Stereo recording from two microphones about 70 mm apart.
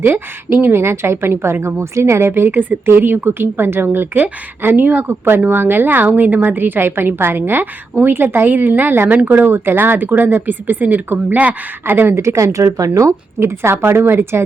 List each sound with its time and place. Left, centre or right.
0.0 s speech: right
13.6 s speech: right